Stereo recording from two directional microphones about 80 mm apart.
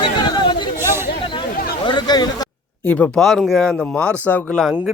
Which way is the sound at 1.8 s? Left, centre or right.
Left.